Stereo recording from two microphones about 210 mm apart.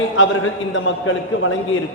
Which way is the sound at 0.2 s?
65° left (ahead or behind).